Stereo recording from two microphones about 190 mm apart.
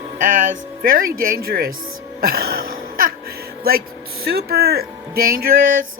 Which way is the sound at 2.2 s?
55° right (ahead or behind).